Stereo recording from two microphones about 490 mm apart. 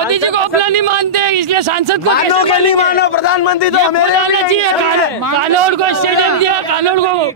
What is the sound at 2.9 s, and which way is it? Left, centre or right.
Speech, left.